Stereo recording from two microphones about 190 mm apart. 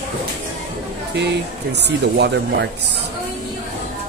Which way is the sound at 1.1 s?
65° right (ahead or behind).